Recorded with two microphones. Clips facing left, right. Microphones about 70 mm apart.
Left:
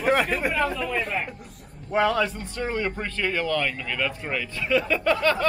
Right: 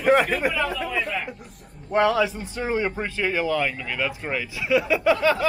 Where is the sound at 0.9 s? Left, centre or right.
Left.